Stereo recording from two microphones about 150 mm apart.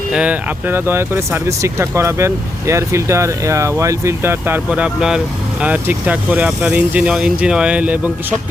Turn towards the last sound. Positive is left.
turn(degrees=-10)  # may be behind; listen again after turning